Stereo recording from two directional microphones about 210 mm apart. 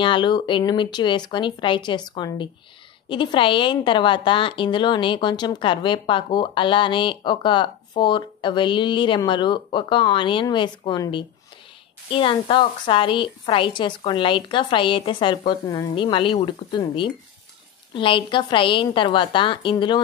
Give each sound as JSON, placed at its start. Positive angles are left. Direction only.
{"t": 0.0, "sound": "a woman's voice", "side_deg": 20}